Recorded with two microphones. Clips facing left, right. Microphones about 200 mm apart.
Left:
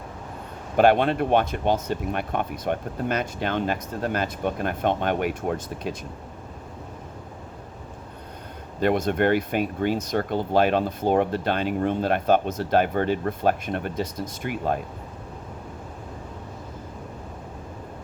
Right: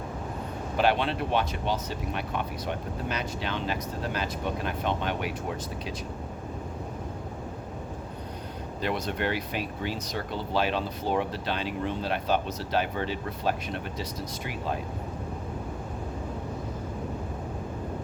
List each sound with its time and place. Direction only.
0.8 s speech: 50° left (ahead or behind)
8.8 s speech: 50° left (ahead or behind)